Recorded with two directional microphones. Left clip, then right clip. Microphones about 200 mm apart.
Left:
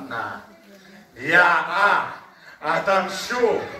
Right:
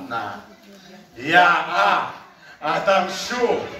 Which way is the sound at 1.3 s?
20° left (ahead or behind).